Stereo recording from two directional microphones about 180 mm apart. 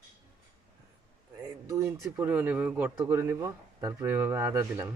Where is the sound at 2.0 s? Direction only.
10° right (ahead or behind).